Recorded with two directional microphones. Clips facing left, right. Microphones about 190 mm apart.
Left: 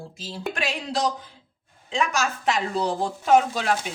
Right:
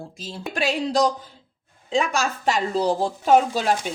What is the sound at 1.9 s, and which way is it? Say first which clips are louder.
Speech: right 3 dB; 35° right (ahead or behind).